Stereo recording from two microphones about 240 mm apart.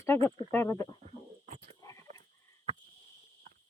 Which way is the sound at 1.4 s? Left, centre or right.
Right.